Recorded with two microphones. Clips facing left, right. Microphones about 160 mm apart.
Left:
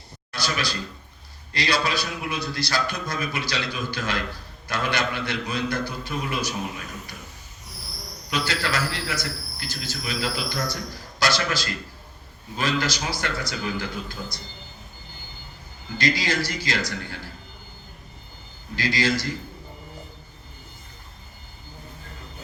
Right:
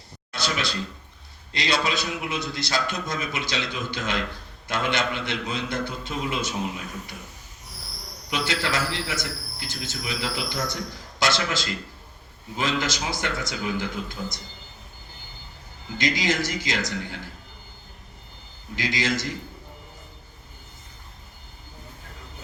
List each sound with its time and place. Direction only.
0.3 s a man's voice: 20° right (ahead or behind)
8.3 s a man's voice: 20° right (ahead or behind)
16.0 s a man's voice: 20° right (ahead or behind)
18.8 s a man's voice: 20° right (ahead or behind)